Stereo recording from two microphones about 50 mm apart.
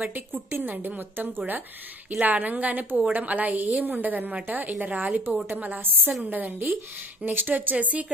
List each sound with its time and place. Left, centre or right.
0.0 s speech: right
2.0 s speech: right
7.7 s speech: right